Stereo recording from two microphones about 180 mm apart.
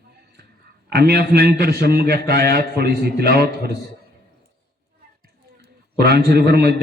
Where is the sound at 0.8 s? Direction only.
60° right (ahead or behind).